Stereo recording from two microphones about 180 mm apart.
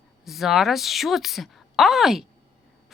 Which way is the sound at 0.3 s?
Centre (ahead or behind).